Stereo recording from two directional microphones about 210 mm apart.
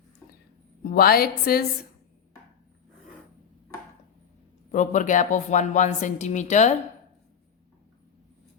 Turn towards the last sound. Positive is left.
turn(degrees=35)  # may be behind; listen again after turning